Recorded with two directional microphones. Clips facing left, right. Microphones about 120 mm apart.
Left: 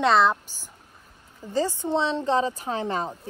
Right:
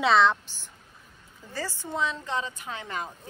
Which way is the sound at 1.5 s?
20° left (ahead or behind).